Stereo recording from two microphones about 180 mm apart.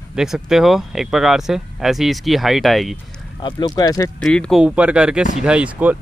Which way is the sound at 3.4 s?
25° left (ahead or behind).